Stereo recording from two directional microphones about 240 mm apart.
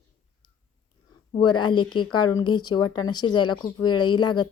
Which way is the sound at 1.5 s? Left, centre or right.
Centre.